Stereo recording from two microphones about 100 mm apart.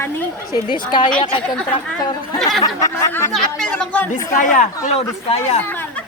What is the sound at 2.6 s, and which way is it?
Speech, 35° left (ahead or behind).